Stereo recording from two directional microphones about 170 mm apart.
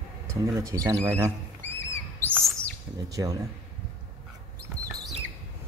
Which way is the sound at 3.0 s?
20° right (ahead or behind).